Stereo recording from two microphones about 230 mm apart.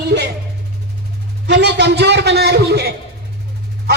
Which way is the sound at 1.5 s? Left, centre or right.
Right.